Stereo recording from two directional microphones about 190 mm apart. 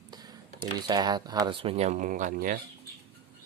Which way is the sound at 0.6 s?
20° right (ahead or behind).